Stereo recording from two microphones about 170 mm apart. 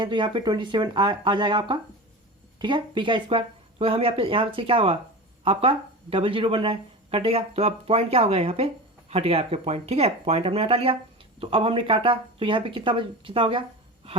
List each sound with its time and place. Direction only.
0.0 s speech: 30° right (ahead or behind)